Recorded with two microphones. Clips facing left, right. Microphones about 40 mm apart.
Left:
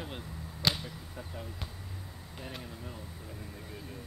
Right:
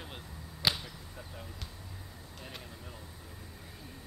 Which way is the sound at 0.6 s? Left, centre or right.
Centre.